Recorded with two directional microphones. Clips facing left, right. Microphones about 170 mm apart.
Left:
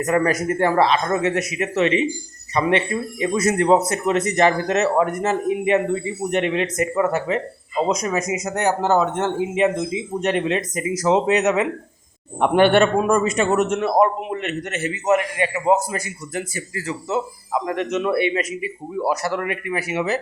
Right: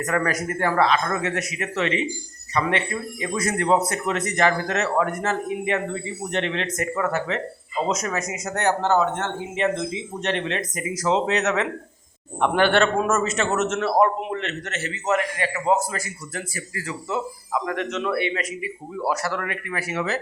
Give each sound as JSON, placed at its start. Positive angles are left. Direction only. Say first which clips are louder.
{"t": 0.0, "sound": "a man's voice", "louder": "left 5 dB", "side_deg": 20}